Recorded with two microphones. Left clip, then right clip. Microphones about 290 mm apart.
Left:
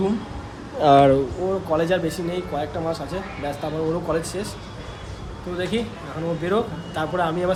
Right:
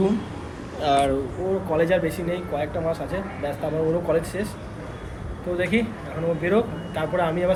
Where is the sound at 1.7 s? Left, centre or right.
Centre.